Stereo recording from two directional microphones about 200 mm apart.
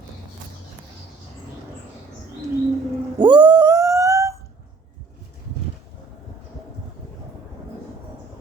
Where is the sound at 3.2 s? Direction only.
20° right (ahead or behind).